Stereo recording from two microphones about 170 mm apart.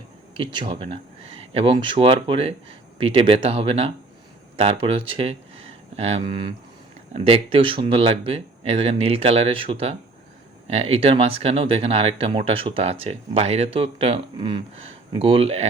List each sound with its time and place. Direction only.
0.3 s speech: 30° right (ahead or behind)